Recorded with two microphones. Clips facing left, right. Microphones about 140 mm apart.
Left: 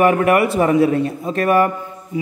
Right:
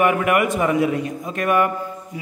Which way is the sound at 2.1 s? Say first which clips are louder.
Left 14 dB; 25° left (ahead or behind).